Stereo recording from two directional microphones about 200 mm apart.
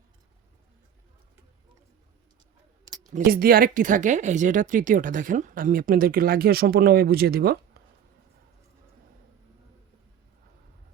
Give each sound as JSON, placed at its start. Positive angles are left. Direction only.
{"t": 3.1, "sound": "speech", "side_deg": -40}